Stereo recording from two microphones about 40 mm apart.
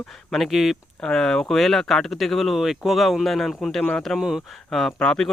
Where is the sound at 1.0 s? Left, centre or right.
Centre.